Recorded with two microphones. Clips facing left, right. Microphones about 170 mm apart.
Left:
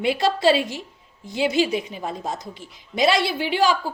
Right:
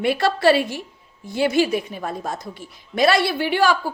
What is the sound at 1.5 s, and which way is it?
Speech, 55° right (ahead or behind).